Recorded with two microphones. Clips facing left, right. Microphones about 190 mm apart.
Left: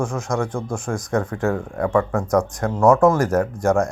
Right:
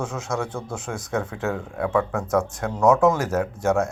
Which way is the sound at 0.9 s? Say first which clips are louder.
Left 4 dB; 5° right (ahead or behind).